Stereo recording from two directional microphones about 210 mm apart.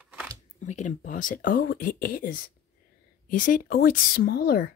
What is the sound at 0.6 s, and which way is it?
Speech, 35° left (ahead or behind).